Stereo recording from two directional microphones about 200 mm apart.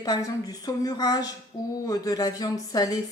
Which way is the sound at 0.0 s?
20° left (ahead or behind).